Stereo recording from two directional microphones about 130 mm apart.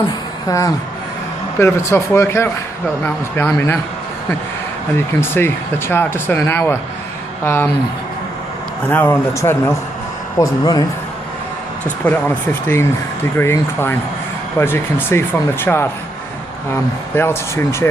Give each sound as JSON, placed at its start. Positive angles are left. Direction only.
{"t": 0.4, "sound": "speech", "side_deg": 25}
{"t": 4.9, "sound": "speech", "side_deg": 20}
{"t": 8.9, "sound": "speech", "side_deg": 15}
{"t": 12.0, "sound": "speech", "side_deg": 10}
{"t": 13.3, "sound": "speech", "side_deg": 20}
{"t": 17.2, "sound": "speech", "side_deg": 20}